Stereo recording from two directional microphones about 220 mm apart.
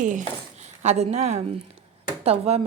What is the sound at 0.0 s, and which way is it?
A woman's voice, 35° right (ahead or behind).